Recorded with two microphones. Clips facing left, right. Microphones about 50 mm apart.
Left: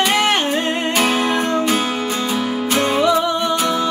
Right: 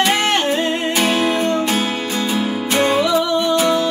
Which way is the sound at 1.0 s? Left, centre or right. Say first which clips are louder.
Even; left.